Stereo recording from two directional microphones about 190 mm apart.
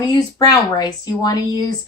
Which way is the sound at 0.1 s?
20° left (ahead or behind).